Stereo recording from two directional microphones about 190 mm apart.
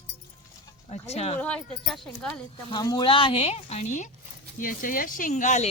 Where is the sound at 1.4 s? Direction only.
5° left (ahead or behind).